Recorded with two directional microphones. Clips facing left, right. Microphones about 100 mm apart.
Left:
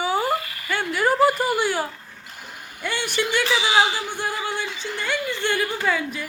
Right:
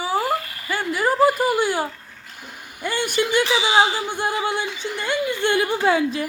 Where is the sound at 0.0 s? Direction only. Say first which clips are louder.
Even; centre (ahead or behind).